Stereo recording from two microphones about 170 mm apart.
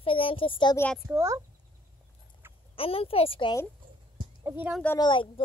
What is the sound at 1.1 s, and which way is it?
Speech, 15° right (ahead or behind).